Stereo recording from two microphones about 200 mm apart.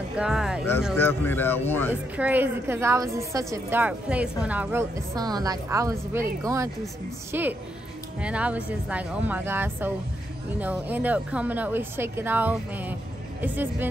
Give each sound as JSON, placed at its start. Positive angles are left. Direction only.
{"t": 0.2, "sound": "speech", "side_deg": -5}
{"t": 0.9, "sound": "speech", "side_deg": 10}
{"t": 2.1, "sound": "a woman's voice", "side_deg": -10}